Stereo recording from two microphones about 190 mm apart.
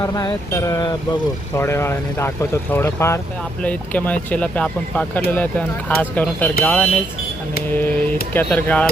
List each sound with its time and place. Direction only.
0.0 s speech: 15° left (ahead or behind)